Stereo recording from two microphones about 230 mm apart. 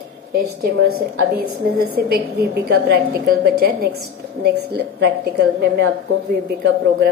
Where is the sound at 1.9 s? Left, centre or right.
Right.